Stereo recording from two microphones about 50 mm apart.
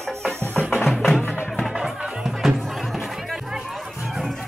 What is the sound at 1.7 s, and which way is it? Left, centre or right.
Music, centre.